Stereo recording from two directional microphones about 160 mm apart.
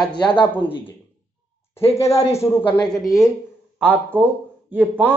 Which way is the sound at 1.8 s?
40° left (ahead or behind).